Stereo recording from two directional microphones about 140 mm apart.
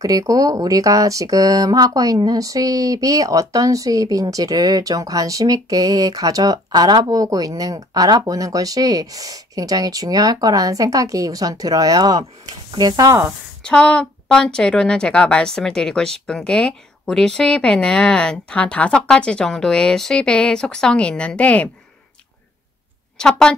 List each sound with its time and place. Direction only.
0.0 s speech: 25° right (ahead or behind)
13.6 s speech: 5° left (ahead or behind)
23.1 s a woman's voice: 5° left (ahead or behind)